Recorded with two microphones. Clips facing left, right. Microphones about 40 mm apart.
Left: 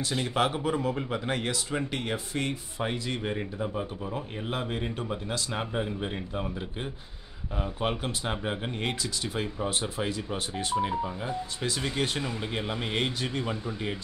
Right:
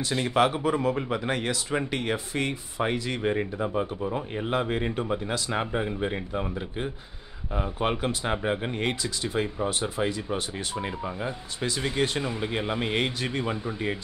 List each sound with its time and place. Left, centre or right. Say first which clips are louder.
0.1 s speech: right 5 dB; centre
10.8 s speech: even; centre
11.6 s speech: right 4 dB; centre